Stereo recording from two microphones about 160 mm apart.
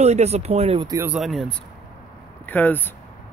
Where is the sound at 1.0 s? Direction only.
5° right (ahead or behind).